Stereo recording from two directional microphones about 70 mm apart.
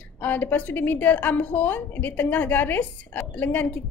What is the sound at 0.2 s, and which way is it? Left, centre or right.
A woman's voice, left.